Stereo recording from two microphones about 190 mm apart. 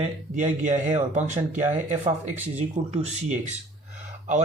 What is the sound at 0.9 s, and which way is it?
Speech, 40° right (ahead or behind).